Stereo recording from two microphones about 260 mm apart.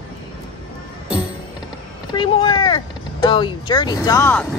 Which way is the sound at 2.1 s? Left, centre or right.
Centre.